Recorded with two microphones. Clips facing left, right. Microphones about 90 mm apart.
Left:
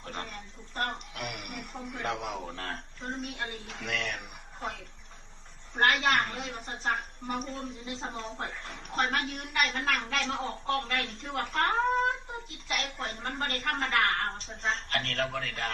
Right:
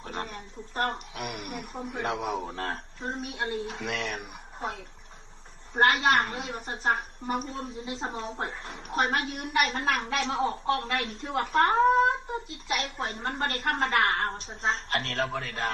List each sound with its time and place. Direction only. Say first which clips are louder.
0.1 s a woman's voice: right 4 dB; 35° right (ahead or behind)
5.8 s a woman's voice: right 3 dB; 30° right (ahead or behind)